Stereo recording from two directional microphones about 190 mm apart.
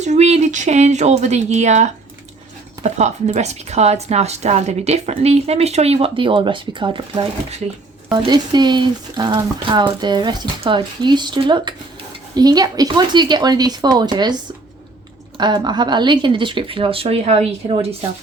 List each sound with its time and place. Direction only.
0.0 s a woman's voice: 35° right (ahead or behind)
15.4 s speech: 20° right (ahead or behind)